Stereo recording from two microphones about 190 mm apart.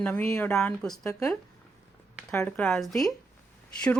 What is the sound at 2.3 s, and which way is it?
Speech, 5° left (ahead or behind).